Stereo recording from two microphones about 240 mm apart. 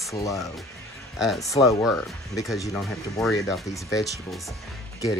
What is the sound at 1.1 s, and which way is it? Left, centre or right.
Speech, centre.